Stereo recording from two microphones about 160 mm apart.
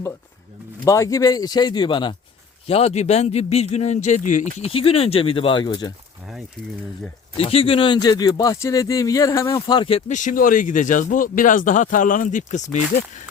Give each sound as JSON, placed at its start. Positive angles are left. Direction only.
{"t": 0.9, "sound": "a man's voice", "side_deg": 20}
{"t": 4.7, "sound": "speech", "side_deg": 35}
{"t": 7.3, "sound": "speech", "side_deg": 35}
{"t": 10.1, "sound": "speech", "side_deg": 50}